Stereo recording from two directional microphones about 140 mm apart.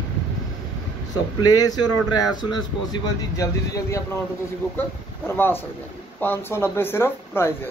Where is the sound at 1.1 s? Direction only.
30° left (ahead or behind).